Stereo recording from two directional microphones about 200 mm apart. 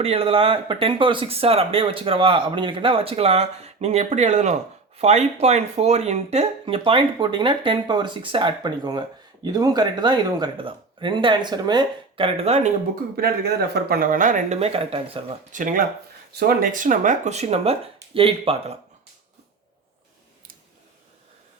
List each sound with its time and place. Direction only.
0.0 s speech: 30° right (ahead or behind)
13.1 s speech: 50° right (ahead or behind); by 15.4 s 30° right (ahead or behind)
15.5 s speech: 40° right (ahead or behind)